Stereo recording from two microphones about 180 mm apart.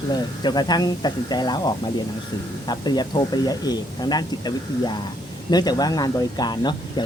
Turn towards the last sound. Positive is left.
turn(degrees=25)  # may be behind; listen again after turning